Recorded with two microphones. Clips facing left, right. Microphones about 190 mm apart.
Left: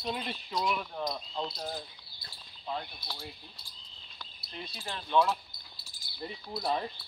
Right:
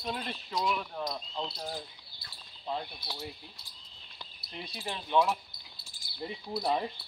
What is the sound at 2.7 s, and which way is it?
A man's voice, 15° right (ahead or behind).